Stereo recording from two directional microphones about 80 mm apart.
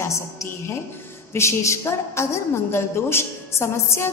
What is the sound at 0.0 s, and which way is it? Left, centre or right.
A woman's voice, left.